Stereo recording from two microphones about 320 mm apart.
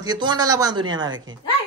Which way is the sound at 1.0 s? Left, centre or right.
Right.